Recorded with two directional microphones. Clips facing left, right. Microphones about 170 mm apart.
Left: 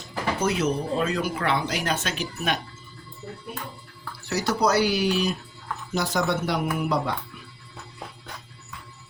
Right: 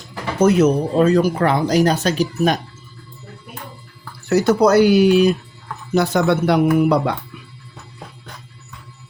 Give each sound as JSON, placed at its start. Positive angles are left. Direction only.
{"t": 0.4, "sound": "speech", "side_deg": -45}
{"t": 4.3, "sound": "speech", "side_deg": -50}